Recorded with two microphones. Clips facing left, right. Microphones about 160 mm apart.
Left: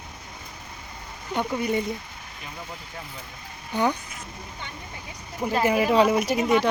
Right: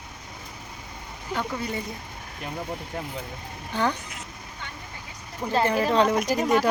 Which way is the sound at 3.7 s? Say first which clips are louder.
Left 2 dB; 15° left (ahead or behind).